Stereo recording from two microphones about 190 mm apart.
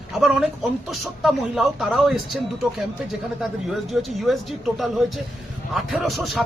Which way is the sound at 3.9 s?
Centre (ahead or behind).